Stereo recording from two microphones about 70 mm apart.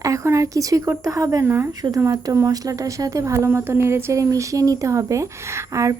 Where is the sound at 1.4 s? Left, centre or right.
Right.